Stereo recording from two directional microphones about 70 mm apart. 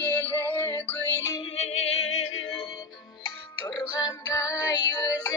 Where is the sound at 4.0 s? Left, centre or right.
Left.